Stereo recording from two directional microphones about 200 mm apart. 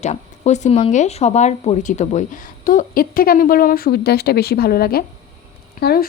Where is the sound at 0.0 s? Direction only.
35° left (ahead or behind).